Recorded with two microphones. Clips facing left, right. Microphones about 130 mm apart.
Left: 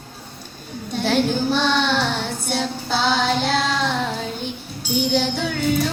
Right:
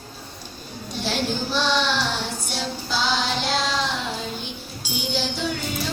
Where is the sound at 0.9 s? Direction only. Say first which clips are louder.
Left 6 dB; 55° left (ahead or behind).